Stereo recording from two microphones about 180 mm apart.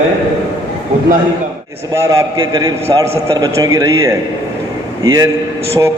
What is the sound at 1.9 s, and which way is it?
A man's voice, 15° right (ahead or behind).